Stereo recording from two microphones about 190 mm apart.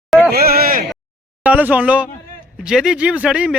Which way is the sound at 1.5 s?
5° right (ahead or behind).